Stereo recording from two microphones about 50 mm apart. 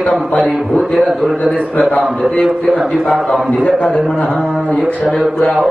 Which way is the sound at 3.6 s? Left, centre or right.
Left.